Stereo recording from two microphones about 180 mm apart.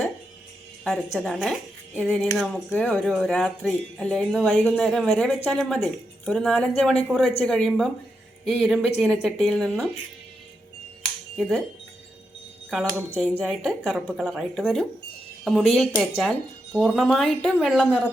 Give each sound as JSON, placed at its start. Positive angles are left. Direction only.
{"t": 0.9, "sound": "speech", "side_deg": 0}
{"t": 11.3, "sound": "speech", "side_deg": 0}
{"t": 13.4, "sound": "speech", "side_deg": 0}